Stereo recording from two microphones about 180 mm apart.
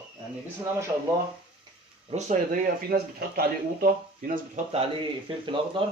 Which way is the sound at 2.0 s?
40° right (ahead or behind).